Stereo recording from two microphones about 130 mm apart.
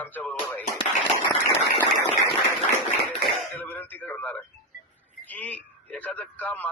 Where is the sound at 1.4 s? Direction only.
20° left (ahead or behind).